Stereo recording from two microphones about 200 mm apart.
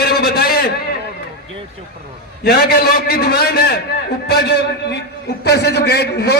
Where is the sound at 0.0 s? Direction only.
50° left (ahead or behind).